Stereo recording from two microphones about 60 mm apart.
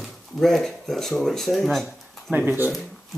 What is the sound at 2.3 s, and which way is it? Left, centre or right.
Speech, right.